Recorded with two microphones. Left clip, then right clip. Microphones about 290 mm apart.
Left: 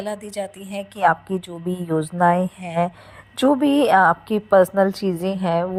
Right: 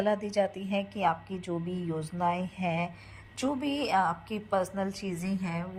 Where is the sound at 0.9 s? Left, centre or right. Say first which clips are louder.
Left 14 dB; left.